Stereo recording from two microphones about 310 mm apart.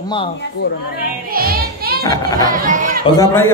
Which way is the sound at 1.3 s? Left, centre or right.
Right.